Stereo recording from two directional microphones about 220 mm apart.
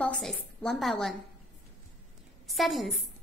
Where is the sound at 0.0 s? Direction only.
5° left (ahead or behind).